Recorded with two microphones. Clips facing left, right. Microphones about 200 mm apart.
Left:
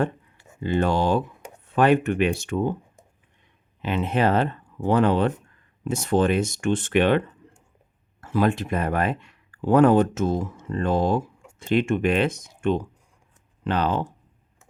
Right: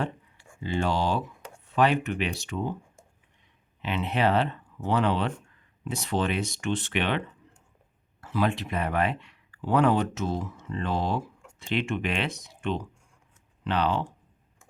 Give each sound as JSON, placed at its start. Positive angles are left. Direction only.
{"t": 0.6, "sound": "speech", "side_deg": 50}
{"t": 3.8, "sound": "speech", "side_deg": 45}